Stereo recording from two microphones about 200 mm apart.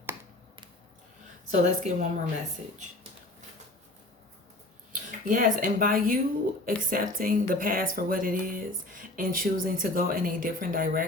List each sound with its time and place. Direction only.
1.5 s a woman's voice: 35° right (ahead or behind)
4.9 s speech: 40° right (ahead or behind)